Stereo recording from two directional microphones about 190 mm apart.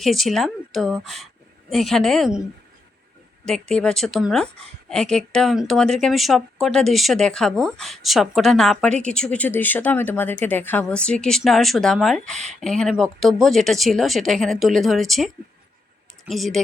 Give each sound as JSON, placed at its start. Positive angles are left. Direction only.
{"t": 0.0, "sound": "speech", "side_deg": 0}
{"t": 3.4, "sound": "speech", "side_deg": 5}